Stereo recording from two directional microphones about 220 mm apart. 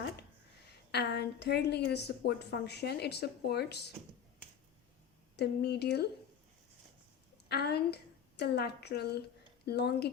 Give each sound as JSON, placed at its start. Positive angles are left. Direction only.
{"t": 0.9, "sound": "a woman's voice", "side_deg": 50}
{"t": 5.4, "sound": "a woman's voice", "side_deg": 50}
{"t": 7.4, "sound": "a woman's voice", "side_deg": 45}